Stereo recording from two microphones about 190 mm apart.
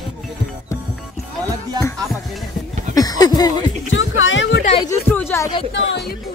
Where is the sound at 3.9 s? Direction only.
90° left; by 4.6 s 70° left (ahead or behind).